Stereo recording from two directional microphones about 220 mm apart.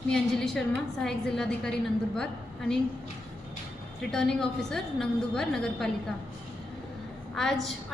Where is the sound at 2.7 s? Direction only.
45° left (ahead or behind).